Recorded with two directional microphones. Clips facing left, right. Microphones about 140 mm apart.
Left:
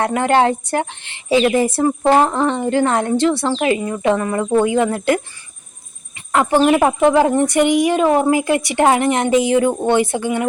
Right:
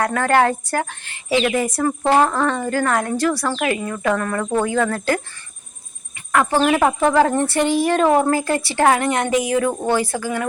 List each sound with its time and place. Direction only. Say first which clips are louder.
0.0 s speech: left 2 dB; 20° left (ahead or behind)
6.1 s a sound: left 3 dB; 20° left (ahead or behind)
6.7 s speech: left 3 dB; 20° left (ahead or behind)